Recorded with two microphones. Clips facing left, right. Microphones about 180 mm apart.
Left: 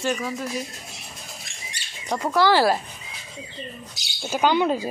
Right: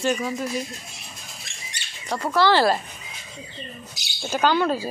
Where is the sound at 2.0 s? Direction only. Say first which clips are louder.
Even; 15° left (ahead or behind).